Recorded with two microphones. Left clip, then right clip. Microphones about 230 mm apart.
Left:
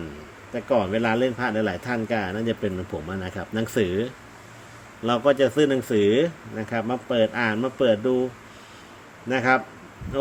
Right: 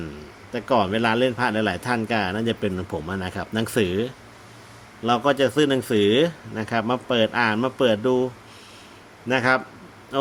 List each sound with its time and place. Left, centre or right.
0.5 s a man's voice: centre
9.3 s a man's voice: centre